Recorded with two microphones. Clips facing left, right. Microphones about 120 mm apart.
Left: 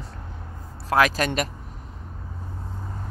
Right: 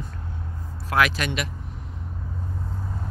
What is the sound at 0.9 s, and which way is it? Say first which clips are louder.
Speech: left 2 dB; 40° left (ahead or behind).